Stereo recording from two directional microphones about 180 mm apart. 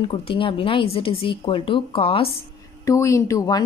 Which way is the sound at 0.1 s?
30° left (ahead or behind).